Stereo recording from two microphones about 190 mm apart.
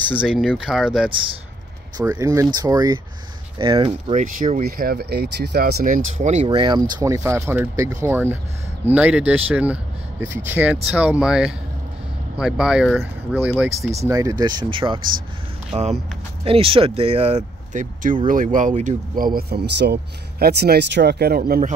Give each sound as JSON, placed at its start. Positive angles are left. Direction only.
{"t": 0.2, "sound": "speech", "side_deg": -5}
{"t": 2.0, "sound": "speech", "side_deg": -15}
{"t": 4.1, "sound": "speech", "side_deg": -40}
{"t": 6.2, "sound": "speech", "side_deg": -35}
{"t": 15.7, "sound": "speech", "side_deg": -35}